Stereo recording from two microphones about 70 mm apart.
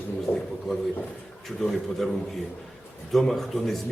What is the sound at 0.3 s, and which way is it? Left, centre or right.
Speech, left.